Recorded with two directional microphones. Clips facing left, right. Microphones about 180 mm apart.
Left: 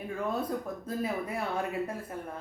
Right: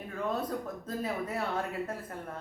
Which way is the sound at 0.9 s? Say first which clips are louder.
Left 2 dB; 10° left (ahead or behind).